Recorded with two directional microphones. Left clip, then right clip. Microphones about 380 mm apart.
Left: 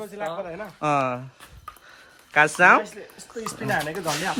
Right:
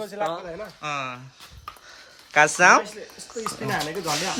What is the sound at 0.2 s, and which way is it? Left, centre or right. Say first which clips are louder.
Speech: right 4 dB; centre.